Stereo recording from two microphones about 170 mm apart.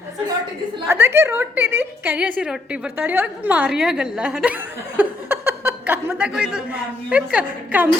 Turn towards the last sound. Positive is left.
turn(degrees=-10)  # may be behind; listen again after turning